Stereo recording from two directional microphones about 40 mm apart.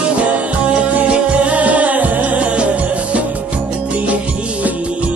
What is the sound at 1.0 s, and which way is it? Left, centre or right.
Music, right.